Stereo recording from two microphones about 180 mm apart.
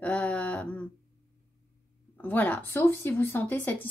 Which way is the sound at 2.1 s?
10° left (ahead or behind).